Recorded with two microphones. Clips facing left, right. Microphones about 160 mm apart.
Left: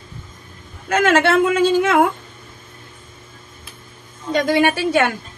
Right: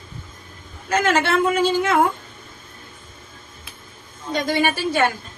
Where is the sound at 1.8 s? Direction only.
75° left (ahead or behind).